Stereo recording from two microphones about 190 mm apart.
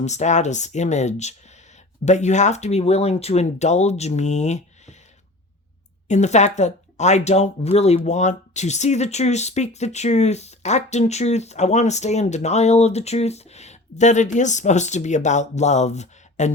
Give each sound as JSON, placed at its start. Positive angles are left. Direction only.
{"t": 0.0, "sound": "speech", "side_deg": 35}
{"t": 6.1, "sound": "speech", "side_deg": 35}